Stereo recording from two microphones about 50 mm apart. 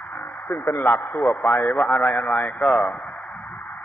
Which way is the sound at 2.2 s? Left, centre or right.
Centre.